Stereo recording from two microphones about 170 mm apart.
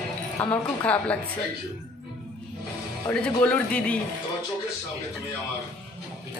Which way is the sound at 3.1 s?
5° left (ahead or behind).